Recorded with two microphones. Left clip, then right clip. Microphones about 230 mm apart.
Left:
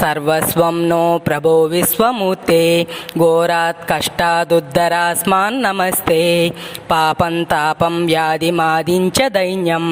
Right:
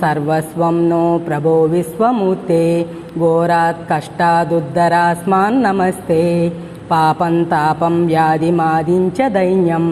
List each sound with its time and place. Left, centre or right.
0.0 s mantra: left